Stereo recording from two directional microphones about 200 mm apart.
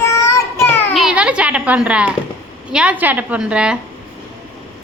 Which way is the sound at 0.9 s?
5° right (ahead or behind).